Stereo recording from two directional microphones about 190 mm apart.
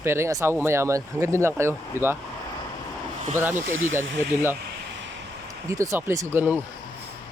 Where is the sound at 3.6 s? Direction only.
90° right.